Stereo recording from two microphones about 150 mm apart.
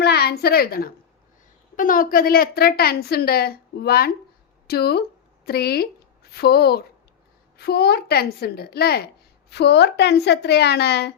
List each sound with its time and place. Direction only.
0.0 s a woman's voice: 90° left
1.7 s a woman's voice: 65° left (ahead or behind); by 11.1 s 90° left